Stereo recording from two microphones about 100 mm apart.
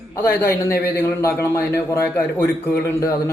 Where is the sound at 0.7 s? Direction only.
25° left (ahead or behind).